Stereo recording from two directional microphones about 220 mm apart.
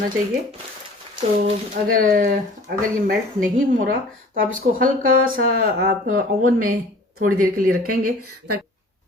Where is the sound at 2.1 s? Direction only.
40° right (ahead or behind).